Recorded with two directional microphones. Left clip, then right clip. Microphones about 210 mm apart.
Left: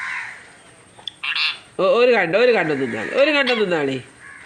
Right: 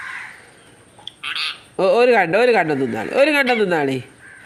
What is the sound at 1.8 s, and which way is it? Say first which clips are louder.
Speech: right 1 dB; 30° right (ahead or behind).